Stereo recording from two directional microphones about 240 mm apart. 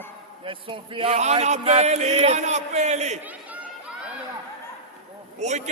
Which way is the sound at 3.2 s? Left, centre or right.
Centre.